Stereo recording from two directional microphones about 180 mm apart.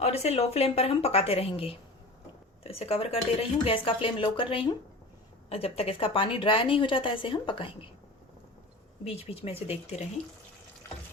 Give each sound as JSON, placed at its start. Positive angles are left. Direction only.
{"t": 0.0, "sound": "a woman's voice", "side_deg": 35}
{"t": 9.0, "sound": "speech", "side_deg": 35}